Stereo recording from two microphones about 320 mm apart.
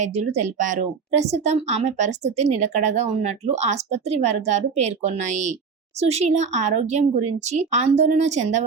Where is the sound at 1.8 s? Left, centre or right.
Right.